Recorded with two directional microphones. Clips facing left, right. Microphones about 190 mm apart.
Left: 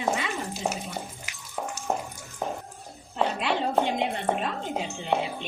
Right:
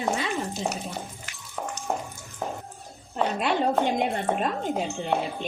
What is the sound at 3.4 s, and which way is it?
Speech, 45° right (ahead or behind).